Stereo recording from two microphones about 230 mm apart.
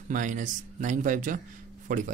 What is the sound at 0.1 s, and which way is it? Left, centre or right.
Speech, right.